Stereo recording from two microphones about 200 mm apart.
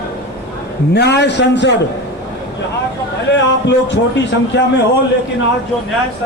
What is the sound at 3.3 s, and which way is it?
Speech, 60° left (ahead or behind).